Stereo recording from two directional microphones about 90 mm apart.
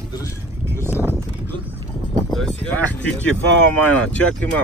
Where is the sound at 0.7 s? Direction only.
25° right (ahead or behind).